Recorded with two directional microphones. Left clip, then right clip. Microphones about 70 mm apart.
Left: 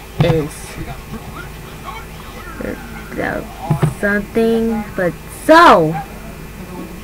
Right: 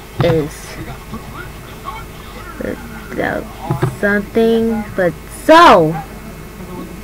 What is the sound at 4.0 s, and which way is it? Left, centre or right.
Speech, centre.